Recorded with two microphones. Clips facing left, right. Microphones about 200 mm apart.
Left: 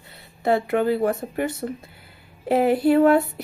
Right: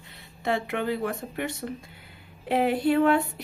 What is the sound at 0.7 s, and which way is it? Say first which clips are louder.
Speech: left 7 dB; 45° left (ahead or behind).